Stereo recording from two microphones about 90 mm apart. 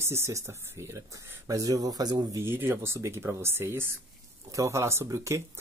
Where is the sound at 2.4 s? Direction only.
25° right (ahead or behind).